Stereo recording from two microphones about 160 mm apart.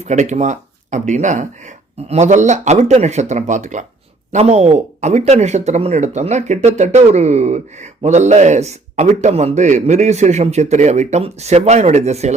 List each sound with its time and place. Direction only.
0.0 s speech: 45° right (ahead or behind)